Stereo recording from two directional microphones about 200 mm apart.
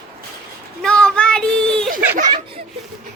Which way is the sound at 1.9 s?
40° right (ahead or behind).